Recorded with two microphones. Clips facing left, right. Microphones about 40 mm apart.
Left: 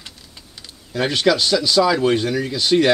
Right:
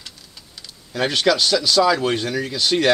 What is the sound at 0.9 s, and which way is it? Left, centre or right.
Speech, centre.